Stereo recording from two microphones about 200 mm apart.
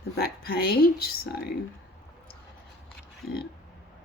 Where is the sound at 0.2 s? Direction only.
50° left (ahead or behind).